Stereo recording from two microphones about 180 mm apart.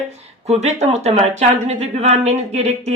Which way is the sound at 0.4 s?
40° right (ahead or behind).